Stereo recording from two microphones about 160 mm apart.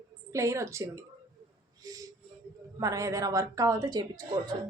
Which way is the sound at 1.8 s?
20° right (ahead or behind).